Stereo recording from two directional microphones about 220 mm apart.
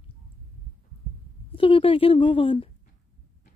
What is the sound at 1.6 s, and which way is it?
A woman's voice, 25° left (ahead or behind).